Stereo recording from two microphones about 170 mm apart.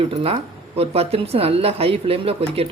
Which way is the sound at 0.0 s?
35° right (ahead or behind).